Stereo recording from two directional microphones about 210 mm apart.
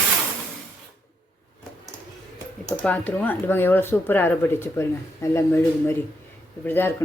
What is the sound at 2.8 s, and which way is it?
Speech, 5° left (ahead or behind).